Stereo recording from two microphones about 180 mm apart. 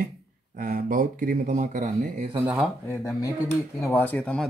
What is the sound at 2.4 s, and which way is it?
Speech, 5° right (ahead or behind).